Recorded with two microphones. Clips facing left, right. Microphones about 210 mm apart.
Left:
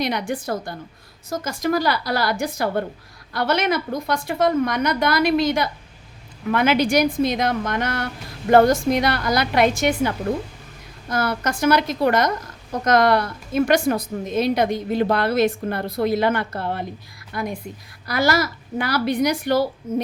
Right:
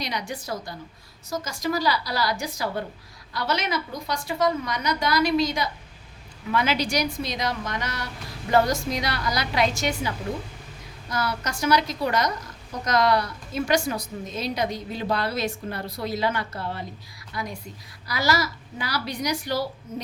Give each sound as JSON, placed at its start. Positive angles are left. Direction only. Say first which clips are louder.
{"t": 0.0, "sound": "a woman's voice", "louder": "left 8 dB", "side_deg": 55}